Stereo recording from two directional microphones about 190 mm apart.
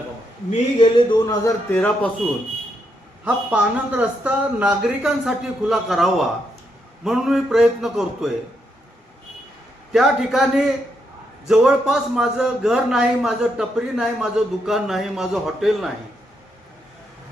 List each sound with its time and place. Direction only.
0.8 s speech: 25° left (ahead or behind)
3.2 s a man's voice: 5° right (ahead or behind)
9.9 s a man's voice: centre (ahead or behind)